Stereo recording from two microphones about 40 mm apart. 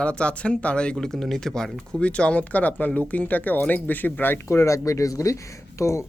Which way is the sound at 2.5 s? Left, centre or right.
Left.